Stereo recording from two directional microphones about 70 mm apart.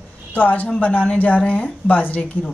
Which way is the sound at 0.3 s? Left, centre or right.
Left.